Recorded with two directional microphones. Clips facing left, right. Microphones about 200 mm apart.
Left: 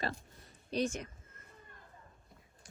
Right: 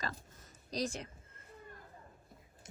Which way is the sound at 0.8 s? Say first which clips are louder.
Left 2 dB; 30° right (ahead or behind).